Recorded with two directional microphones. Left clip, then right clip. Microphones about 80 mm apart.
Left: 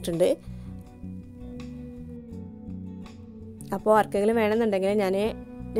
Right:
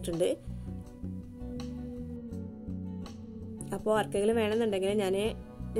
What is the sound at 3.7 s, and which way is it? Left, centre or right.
Speech, left.